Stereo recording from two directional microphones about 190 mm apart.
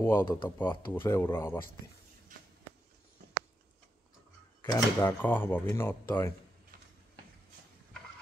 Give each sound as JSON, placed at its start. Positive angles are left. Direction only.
{"t": 0.0, "sound": "speech", "side_deg": 15}
{"t": 2.3, "sound": "a sound", "side_deg": -45}
{"t": 4.6, "sound": "speech", "side_deg": 15}